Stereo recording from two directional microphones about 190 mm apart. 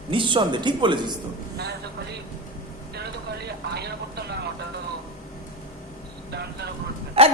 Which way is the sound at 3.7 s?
60° right (ahead or behind).